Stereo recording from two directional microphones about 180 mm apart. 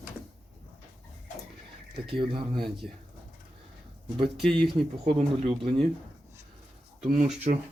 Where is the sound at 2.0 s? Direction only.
30° right (ahead or behind).